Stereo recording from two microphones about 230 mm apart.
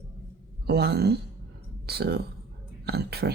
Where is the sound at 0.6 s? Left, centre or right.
Right.